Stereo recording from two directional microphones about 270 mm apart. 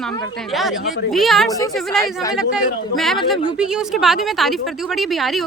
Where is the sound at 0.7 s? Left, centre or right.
Left.